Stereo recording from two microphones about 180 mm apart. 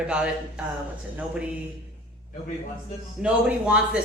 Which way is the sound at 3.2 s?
5° right (ahead or behind).